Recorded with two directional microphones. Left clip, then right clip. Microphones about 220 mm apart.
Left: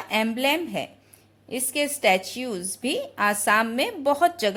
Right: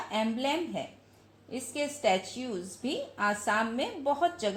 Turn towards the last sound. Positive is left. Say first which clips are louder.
# left 7 dB
turn(degrees=50)  # may be behind; listen again after turning